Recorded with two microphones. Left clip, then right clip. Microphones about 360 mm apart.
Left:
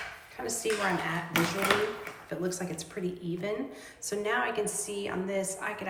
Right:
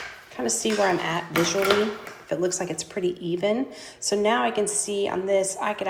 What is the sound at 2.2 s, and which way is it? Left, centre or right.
A woman's voice, centre.